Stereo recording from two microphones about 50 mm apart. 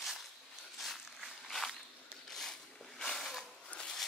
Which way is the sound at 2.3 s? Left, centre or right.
Centre.